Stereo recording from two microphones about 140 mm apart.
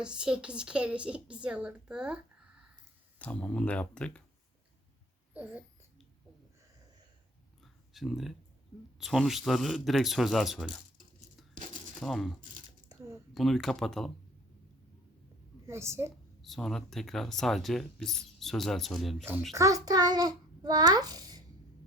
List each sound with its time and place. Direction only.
0.0 s a woman's voice: 5° right (ahead or behind)
3.2 s speech: 10° left (ahead or behind)
5.3 s speech: 10° right (ahead or behind)
7.6 s a sound: centre (ahead or behind)
9.0 s speech: centre (ahead or behind)
11.5 s coin: 65° right (ahead or behind)
11.9 s speech: centre (ahead or behind)
13.3 s speech: centre (ahead or behind)
15.6 s a woman's voice: 20° right (ahead or behind)
16.4 s speech: centre (ahead or behind)
19.5 s a child's voice: 25° right (ahead or behind)